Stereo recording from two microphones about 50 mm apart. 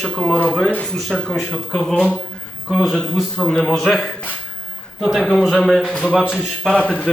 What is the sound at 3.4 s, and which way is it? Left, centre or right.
Speech, centre.